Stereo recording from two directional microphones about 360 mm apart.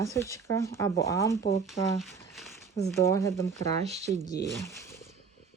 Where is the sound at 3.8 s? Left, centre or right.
Centre.